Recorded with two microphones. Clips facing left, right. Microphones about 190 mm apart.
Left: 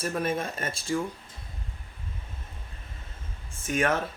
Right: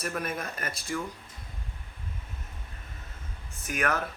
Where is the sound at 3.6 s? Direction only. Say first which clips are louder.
Left 4 dB; 25° left (ahead or behind).